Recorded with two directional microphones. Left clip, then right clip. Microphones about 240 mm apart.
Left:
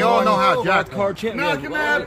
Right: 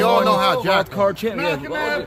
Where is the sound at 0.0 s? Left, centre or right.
Right.